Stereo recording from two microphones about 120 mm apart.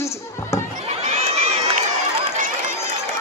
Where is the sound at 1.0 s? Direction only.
60° right (ahead or behind).